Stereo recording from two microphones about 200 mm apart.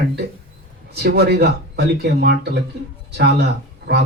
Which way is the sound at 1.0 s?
55° right (ahead or behind).